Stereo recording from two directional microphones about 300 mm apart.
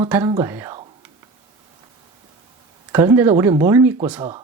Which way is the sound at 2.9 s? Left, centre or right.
Centre.